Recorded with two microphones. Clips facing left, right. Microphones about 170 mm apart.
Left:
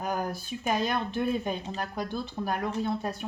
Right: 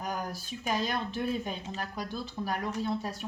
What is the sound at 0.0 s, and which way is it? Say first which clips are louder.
Speech: left 4 dB; 55° left (ahead or behind).